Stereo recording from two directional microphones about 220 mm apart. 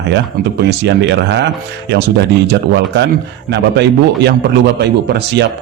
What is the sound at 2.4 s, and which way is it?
Speech, 50° right (ahead or behind).